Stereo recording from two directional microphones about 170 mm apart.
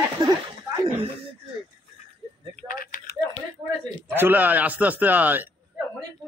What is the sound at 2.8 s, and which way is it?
Typing, 60° left (ahead or behind).